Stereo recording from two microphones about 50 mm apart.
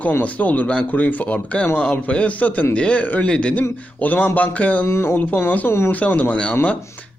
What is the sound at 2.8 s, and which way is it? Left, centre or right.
Speech, left.